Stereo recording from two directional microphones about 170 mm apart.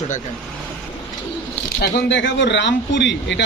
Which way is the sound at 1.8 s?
90° left.